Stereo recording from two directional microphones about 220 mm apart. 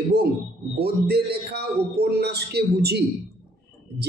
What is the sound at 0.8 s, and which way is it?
Speech, 45° right (ahead or behind).